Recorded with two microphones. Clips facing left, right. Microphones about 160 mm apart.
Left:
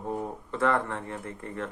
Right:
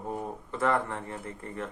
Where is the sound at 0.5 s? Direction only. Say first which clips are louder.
Left 1 dB; 20° right (ahead or behind).